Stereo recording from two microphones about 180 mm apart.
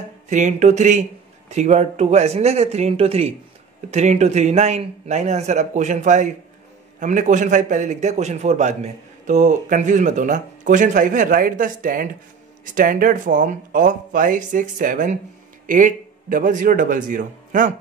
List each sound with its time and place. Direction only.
0.3 s a man's voice: 40° right (ahead or behind)